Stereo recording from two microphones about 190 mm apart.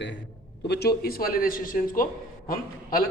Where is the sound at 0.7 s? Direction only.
55° left (ahead or behind).